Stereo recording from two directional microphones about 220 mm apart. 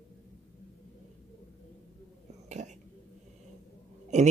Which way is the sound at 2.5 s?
35° right (ahead or behind).